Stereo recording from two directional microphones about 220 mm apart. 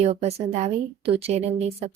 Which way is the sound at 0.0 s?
30° right (ahead or behind).